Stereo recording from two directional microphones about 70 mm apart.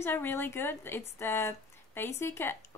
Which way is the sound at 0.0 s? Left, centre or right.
Left.